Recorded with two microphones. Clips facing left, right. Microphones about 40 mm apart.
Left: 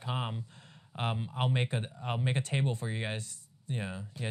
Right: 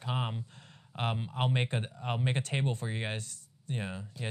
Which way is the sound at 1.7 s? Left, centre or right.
Right.